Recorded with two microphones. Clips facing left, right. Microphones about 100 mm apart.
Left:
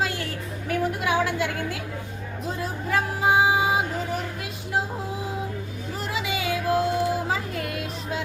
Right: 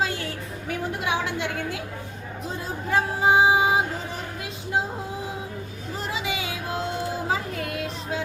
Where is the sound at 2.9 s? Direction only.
25° right (ahead or behind).